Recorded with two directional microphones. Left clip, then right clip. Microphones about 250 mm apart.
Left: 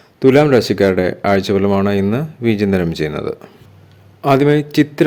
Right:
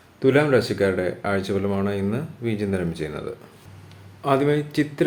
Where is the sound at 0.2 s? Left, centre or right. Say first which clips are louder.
Left 8 dB; left.